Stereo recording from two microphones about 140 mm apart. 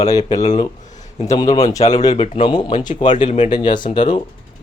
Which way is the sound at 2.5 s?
30° left (ahead or behind).